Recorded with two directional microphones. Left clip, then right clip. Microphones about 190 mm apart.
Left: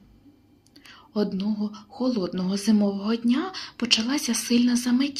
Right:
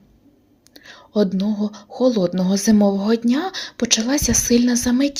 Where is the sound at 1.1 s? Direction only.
35° right (ahead or behind).